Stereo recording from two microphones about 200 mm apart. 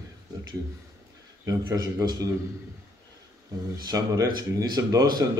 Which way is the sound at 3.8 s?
20° right (ahead or behind).